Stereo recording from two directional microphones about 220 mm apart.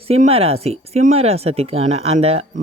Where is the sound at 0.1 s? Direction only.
25° right (ahead or behind).